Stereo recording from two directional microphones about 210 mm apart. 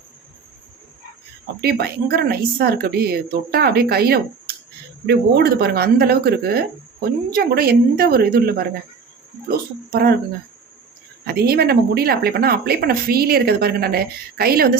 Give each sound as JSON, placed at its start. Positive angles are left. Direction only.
{"t": 1.6, "sound": "a woman's voice", "side_deg": -50}
{"t": 11.3, "sound": "a woman's voice", "side_deg": -50}